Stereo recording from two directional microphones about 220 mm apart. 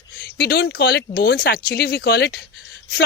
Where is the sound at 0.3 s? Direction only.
50° left (ahead or behind).